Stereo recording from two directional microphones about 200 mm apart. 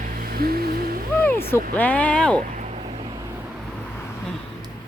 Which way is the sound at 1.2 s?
10° left (ahead or behind).